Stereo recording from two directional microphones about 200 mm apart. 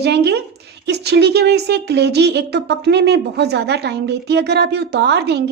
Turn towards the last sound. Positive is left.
turn(degrees=-55)  # may be behind; listen again after turning